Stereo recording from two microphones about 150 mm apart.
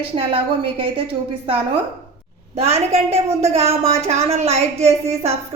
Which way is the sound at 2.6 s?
45° right (ahead or behind).